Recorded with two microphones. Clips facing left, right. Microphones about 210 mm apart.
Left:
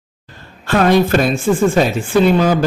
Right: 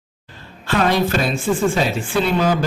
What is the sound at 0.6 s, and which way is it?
Speech, 50° left (ahead or behind).